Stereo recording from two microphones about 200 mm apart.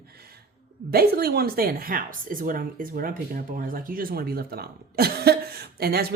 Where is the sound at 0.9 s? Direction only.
50° right (ahead or behind).